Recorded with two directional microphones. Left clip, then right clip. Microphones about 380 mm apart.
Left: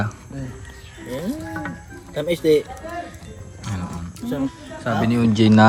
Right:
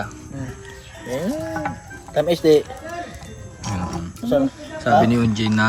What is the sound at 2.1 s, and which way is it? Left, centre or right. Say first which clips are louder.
Speech: right 3 dB; centre.